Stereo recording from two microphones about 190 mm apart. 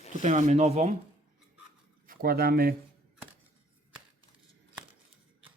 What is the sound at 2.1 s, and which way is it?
Speech, 50° right (ahead or behind).